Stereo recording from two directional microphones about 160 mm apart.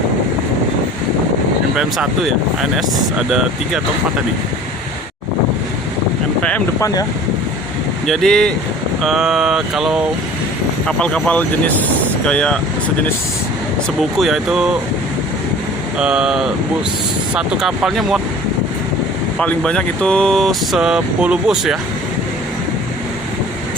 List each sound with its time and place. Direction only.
1.7 s speech: centre (ahead or behind)
6.7 s speech: 20° left (ahead or behind)
8.0 s speech: centre (ahead or behind)
14.2 s speech: centre (ahead or behind)
16.0 s speech: 5° right (ahead or behind)
19.4 s speech: 5° left (ahead or behind)